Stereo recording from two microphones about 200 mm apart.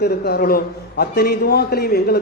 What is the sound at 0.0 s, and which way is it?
A man's voice, 50° left (ahead or behind).